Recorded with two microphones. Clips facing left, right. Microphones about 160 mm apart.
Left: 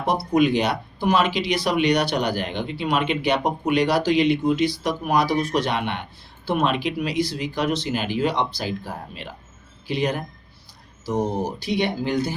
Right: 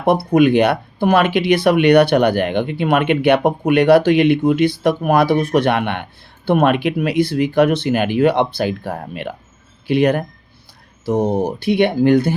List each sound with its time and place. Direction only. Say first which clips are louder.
0.0 s speech: right 6 dB; 60° right (ahead or behind)